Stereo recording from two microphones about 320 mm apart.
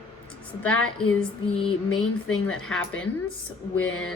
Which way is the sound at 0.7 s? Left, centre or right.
Left.